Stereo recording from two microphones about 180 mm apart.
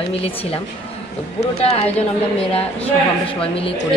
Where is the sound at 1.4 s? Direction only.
35° left (ahead or behind).